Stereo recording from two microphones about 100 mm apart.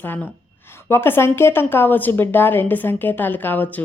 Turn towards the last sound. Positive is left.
turn(degrees=15)  # may be behind; listen again after turning